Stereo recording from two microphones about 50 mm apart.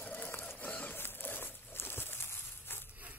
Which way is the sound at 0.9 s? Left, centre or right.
Left.